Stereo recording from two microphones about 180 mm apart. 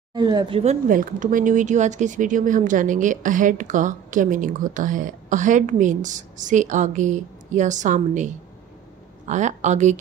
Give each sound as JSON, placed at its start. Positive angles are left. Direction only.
{"t": 0.1, "sound": "a woman's voice", "side_deg": -25}
{"t": 0.6, "sound": "speech", "side_deg": -45}
{"t": 9.3, "sound": "a woman's voice", "side_deg": -40}